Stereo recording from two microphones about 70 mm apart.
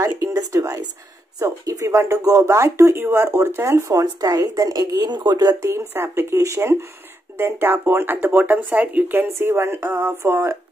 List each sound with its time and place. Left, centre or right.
0.0 s a sound: right
1.4 s speech: right
3.9 s speech: right
5.6 s speech: right